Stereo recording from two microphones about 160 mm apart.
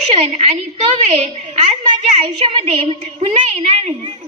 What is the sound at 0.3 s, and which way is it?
Speech, 45° right (ahead or behind).